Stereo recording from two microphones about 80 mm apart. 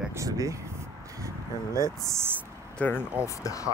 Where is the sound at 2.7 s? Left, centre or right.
Left.